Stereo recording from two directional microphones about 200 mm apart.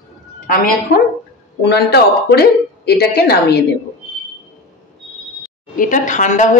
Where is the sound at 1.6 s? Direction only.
55° left (ahead or behind).